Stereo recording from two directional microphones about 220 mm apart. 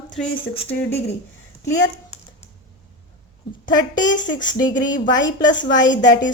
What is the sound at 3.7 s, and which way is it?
Speech, 20° left (ahead or behind).